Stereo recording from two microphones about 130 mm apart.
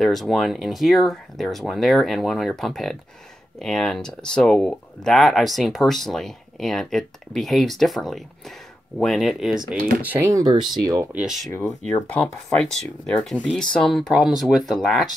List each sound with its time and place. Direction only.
0.0 s speech: centre (ahead or behind)
10.3 s speech: 35° right (ahead or behind)
11.1 s speech: 5° right (ahead or behind)
11.8 s speech: 10° left (ahead or behind)